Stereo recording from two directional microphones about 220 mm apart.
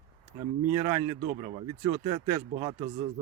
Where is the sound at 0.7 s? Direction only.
15° right (ahead or behind).